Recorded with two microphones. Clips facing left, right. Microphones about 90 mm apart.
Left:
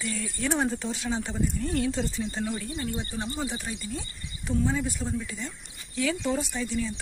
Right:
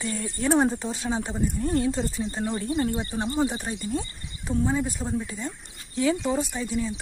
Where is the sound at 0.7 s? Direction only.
25° right (ahead or behind).